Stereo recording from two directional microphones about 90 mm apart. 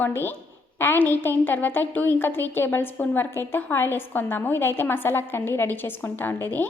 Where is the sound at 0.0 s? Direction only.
25° left (ahead or behind).